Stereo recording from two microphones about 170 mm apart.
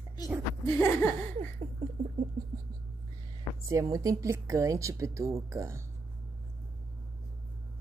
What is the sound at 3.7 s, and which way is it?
A woman's voice, 20° right (ahead or behind).